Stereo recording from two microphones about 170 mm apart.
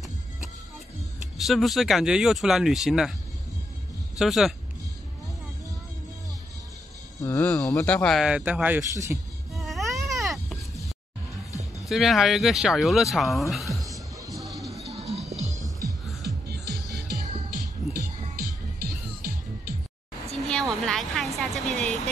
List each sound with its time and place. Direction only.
1.4 s speech: centre (ahead or behind)
4.2 s speech: centre (ahead or behind)
7.2 s speech: 15° left (ahead or behind); by 9.2 s 15° right (ahead or behind)
9.5 s baby cry: centre (ahead or behind)
11.9 s speech: centre (ahead or behind)
13.8 s music: 20° right (ahead or behind)
14.3 s music: centre (ahead or behind)
14.9 s music: 40° right (ahead or behind)
15.5 s music: 20° right (ahead or behind)
17.1 s music: 60° right (ahead or behind)
20.4 s vehicle: 5° left (ahead or behind)